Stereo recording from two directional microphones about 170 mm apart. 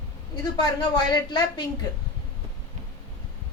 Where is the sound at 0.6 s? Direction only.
25° left (ahead or behind).